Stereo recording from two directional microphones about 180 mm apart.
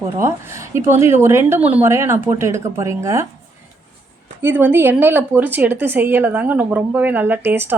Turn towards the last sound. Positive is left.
turn(degrees=-10)  # may be behind; listen again after turning